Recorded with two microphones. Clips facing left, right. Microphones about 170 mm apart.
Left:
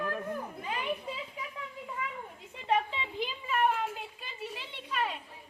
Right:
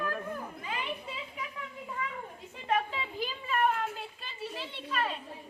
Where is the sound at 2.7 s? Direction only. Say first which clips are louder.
Left 1 dB; 20° left (ahead or behind).